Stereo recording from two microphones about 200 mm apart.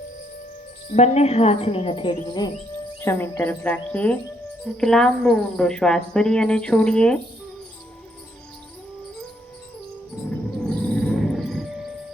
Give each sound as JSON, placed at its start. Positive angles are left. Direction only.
{"t": 0.9, "sound": "a woman's voice", "side_deg": 35}
{"t": 3.0, "sound": "speech", "side_deg": 10}
{"t": 10.2, "sound": "cricket", "side_deg": 5}